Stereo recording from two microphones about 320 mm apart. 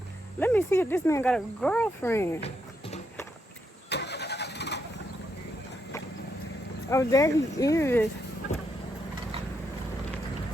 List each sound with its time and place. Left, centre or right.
0.3 s speech: centre
2.4 s a sound: centre
3.8 s vehicle: left
6.9 s speech: centre